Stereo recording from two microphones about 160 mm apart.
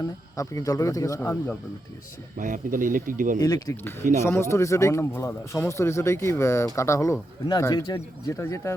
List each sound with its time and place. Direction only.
0.0 s speech: 20° left (ahead or behind)
2.4 s speech: 55° right (ahead or behind)
3.4 s speech: 20° left (ahead or behind)